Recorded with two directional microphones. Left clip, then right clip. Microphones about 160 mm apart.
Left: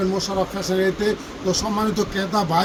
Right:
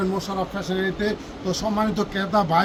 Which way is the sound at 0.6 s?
Centre (ahead or behind).